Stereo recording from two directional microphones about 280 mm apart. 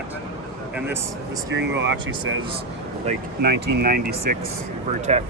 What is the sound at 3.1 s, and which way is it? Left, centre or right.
Speech, right.